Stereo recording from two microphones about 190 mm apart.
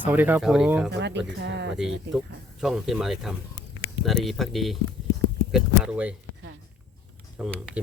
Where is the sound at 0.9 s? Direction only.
65° right (ahead or behind).